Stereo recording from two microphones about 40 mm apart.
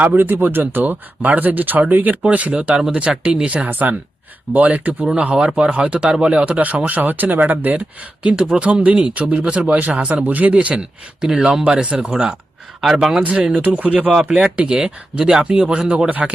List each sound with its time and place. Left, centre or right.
0.2 s speech: right
2.2 s speech: right
2.5 s speech: right
3.7 s speech: right
5.1 s speech: right
8.2 s speech: right
10.2 s speech: right
10.8 s speech: centre
13.0 s speech: centre
13.3 s speech: right
13.6 s speech: right
14.3 s speech: right
15.7 s speech: right